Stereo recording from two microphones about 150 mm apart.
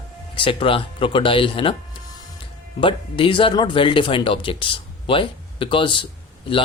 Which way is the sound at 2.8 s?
35° left (ahead or behind).